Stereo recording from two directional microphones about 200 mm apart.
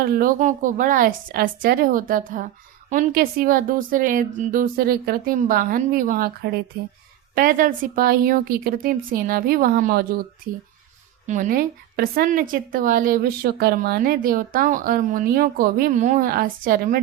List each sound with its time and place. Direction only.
0.0 s a woman's voice: 45° right (ahead or behind)
11.3 s a woman's voice: 40° right (ahead or behind)